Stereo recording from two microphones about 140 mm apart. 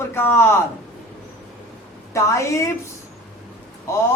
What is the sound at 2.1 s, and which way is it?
Speech, 20° left (ahead or behind).